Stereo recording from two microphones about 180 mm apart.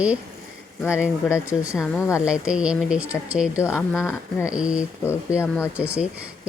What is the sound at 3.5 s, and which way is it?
Speech, 15° left (ahead or behind).